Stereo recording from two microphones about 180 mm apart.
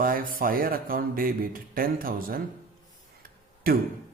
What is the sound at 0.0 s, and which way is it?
A man's voice, 50° right (ahead or behind).